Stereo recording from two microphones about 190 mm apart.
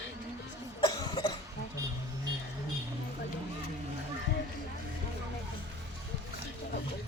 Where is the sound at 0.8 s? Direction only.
25° left (ahead or behind).